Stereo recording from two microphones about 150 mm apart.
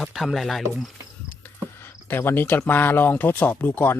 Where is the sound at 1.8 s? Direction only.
15° left (ahead or behind).